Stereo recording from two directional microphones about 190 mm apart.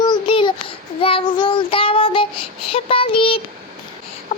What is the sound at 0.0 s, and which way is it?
Child singing, 25° left (ahead or behind).